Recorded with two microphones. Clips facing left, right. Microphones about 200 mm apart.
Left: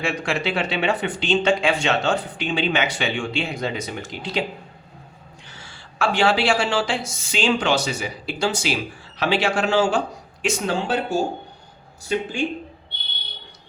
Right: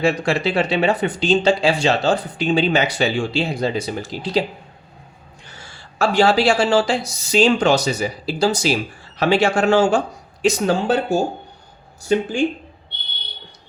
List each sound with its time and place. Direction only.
0.0 s speech: 35° right (ahead or behind)
5.5 s speech: 40° right (ahead or behind)